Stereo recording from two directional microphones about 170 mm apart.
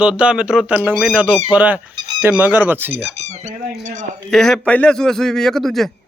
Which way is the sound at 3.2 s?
40° right (ahead or behind).